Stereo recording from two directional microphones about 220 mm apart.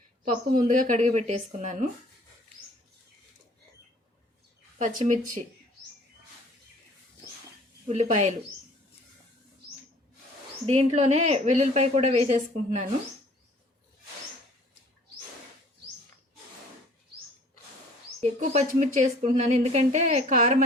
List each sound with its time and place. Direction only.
0.4 s a woman's voice: 35° right (ahead or behind)
4.8 s a woman's voice: 35° right (ahead or behind)
7.9 s a woman's voice: 30° right (ahead or behind)
10.8 s a woman's voice: 30° right (ahead or behind)
18.2 s a woman's voice: 35° right (ahead or behind)